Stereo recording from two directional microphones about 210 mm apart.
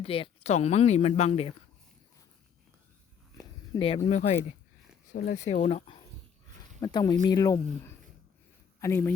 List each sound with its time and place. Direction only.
0.0 s speech: 25° left (ahead or behind)
3.8 s speech: 25° left (ahead or behind)
5.1 s speech: 55° left (ahead or behind)
5.4 s speech: 35° left (ahead or behind)
6.7 s speech: 20° left (ahead or behind)